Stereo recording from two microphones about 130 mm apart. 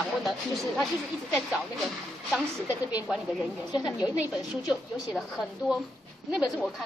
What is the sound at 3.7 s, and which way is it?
Speech, 30° left (ahead or behind).